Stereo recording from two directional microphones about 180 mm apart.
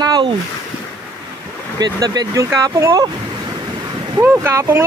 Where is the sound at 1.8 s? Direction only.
20° right (ahead or behind).